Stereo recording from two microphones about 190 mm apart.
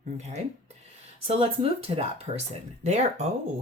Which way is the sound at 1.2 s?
30° right (ahead or behind).